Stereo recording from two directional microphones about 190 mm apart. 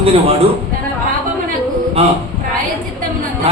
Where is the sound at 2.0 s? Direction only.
30° right (ahead or behind).